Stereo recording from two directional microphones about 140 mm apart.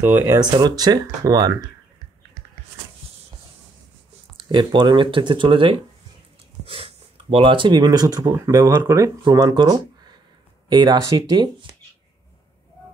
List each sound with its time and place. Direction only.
0.0 s speech: 15° right (ahead or behind)
0.3 s speech: 30° right (ahead or behind)
4.4 s speech: 35° right (ahead or behind)